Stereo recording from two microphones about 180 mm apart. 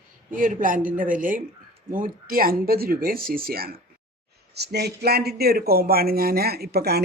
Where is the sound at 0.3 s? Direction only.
50° right (ahead or behind).